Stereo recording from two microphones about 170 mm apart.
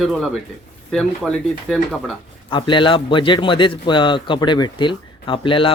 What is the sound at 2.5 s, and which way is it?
A man's voice, 30° left (ahead or behind).